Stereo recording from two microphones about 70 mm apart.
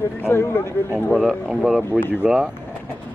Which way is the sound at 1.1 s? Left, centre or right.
Centre.